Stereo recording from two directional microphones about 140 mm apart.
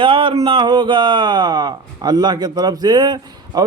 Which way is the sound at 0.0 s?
35° right (ahead or behind).